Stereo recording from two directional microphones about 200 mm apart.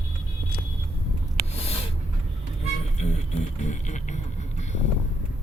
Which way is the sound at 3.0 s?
35° left (ahead or behind).